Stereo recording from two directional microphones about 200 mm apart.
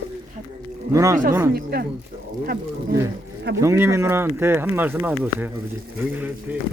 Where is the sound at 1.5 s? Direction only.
50° right (ahead or behind).